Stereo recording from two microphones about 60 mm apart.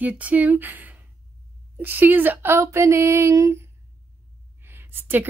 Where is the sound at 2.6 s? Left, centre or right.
Right.